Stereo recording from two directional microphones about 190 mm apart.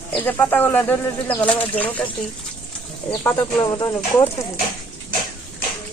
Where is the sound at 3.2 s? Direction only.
20° left (ahead or behind).